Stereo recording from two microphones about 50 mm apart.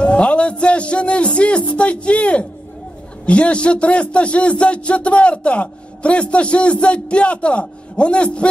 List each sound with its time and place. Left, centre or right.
0.0 s speech: left